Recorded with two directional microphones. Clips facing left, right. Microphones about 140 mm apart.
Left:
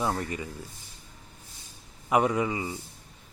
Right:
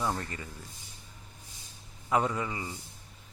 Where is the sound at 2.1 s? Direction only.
15° left (ahead or behind).